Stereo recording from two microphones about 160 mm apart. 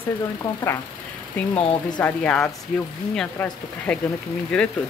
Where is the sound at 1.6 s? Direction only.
35° left (ahead or behind).